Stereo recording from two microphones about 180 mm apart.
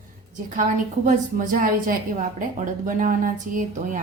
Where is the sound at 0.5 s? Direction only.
45° right (ahead or behind).